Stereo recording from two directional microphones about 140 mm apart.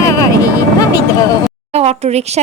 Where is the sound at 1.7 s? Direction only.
50° right (ahead or behind).